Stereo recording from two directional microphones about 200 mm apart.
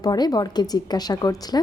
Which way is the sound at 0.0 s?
20° left (ahead or behind).